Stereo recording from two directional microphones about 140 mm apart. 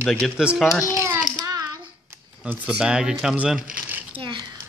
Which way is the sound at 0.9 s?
15° right (ahead or behind).